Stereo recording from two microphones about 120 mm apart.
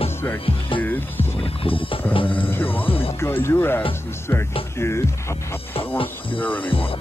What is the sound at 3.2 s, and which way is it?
Speech, 20° left (ahead or behind).